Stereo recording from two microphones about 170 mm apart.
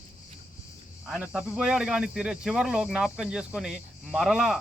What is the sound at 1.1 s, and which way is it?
Speech, centre (ahead or behind).